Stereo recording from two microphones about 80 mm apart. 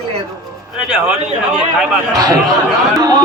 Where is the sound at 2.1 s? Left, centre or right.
Right.